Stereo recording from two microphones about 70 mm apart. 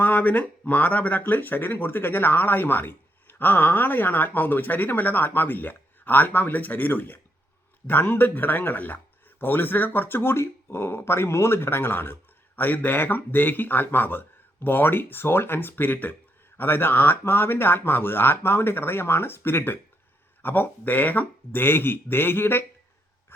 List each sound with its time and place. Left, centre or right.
0.0 s speech: left